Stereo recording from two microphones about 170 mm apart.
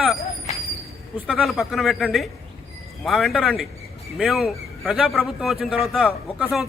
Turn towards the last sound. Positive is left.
turn(degrees=0)  # may be behind; listen again after turning